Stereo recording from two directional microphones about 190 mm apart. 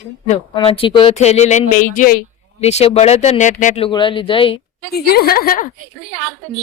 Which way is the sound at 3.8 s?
25° left (ahead or behind).